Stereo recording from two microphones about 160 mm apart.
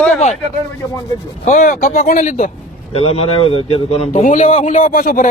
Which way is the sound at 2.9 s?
40° left (ahead or behind).